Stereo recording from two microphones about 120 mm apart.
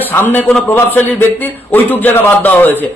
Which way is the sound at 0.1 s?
15° left (ahead or behind).